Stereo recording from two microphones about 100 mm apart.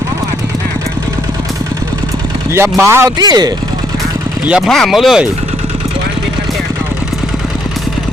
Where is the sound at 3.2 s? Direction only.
40° right (ahead or behind).